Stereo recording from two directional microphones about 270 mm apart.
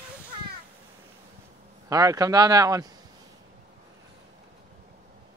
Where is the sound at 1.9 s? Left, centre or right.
Centre.